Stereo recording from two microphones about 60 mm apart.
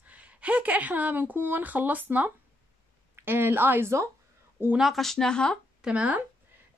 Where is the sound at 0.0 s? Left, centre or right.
Right.